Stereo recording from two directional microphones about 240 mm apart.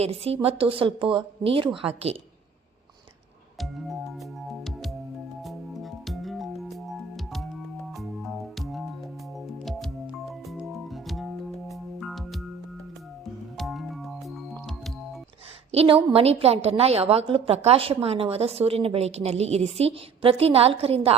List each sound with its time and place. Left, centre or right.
0.0 s a woman's voice: right
3.6 s music: centre
13.6 s music: centre
15.7 s a woman's voice: right